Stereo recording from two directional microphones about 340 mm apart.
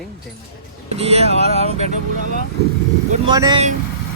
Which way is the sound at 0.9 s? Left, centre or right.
Centre.